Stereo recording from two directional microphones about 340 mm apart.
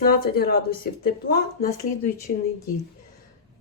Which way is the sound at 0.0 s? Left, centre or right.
Left.